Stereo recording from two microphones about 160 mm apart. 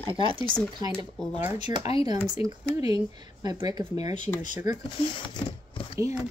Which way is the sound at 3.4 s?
25° right (ahead or behind).